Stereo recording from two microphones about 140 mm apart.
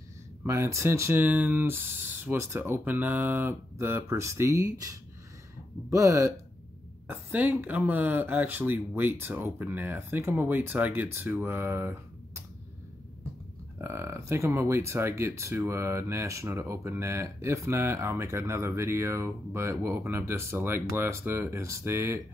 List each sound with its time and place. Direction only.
0.4 s speech: 20° right (ahead or behind)
13.7 s speech: 20° right (ahead or behind)